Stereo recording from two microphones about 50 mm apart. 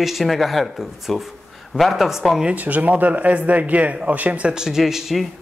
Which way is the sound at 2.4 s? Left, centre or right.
Right.